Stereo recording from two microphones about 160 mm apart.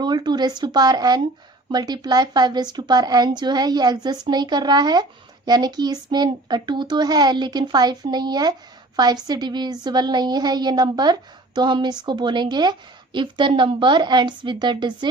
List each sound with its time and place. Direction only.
0.0 s a woman's voice: 25° right (ahead or behind)